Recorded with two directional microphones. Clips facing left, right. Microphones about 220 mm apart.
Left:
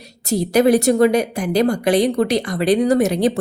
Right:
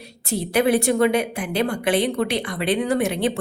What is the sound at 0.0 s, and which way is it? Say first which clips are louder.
A woman's voice: left 6 dB; 40° left (ahead or behind).